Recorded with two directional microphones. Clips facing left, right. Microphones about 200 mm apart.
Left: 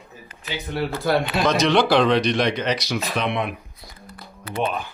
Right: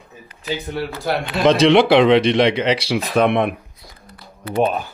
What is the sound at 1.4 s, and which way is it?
A man's voice, 30° right (ahead or behind).